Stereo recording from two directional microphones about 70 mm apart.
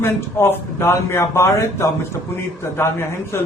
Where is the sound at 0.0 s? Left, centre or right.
Left.